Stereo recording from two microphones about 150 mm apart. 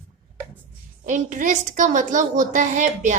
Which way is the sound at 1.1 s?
55° right (ahead or behind).